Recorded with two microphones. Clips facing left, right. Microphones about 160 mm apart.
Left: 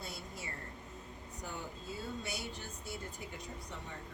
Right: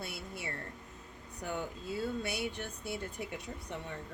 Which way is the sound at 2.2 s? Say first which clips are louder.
Right 6 dB; 65° right (ahead or behind).